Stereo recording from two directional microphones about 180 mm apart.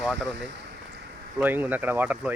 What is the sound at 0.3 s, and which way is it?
Speech, 75° right (ahead or behind).